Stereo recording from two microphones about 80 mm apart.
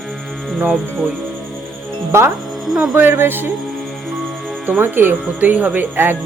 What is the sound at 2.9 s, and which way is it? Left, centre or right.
Speech, right.